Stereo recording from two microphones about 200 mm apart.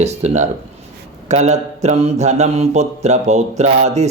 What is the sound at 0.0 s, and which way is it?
Speech, 35° right (ahead or behind).